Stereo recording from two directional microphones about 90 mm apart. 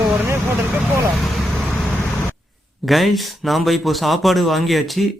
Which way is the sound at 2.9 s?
Centre (ahead or behind).